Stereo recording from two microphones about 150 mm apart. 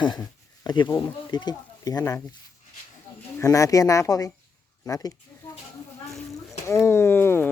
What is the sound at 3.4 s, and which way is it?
Speech, 20° left (ahead or behind).